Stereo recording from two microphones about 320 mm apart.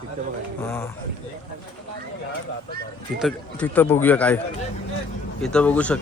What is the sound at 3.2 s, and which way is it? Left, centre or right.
Speech, centre.